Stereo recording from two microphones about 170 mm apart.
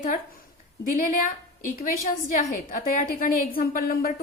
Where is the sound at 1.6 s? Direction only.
55° left (ahead or behind).